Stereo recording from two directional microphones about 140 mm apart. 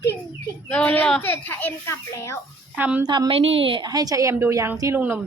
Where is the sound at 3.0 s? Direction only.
30° right (ahead or behind).